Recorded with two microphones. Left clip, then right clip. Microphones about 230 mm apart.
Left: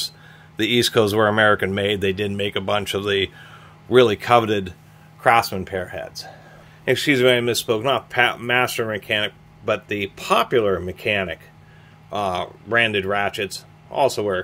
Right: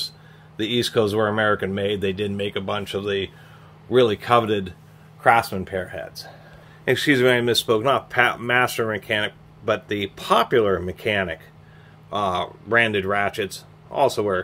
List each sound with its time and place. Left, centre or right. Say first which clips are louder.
0.6 s speech: left 3 dB; left
6.8 s speech: left 1 dB; centre